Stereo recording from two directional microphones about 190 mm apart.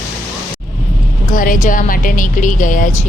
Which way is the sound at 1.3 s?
45° left (ahead or behind).